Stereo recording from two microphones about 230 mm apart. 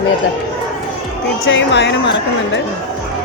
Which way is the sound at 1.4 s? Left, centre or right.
Left.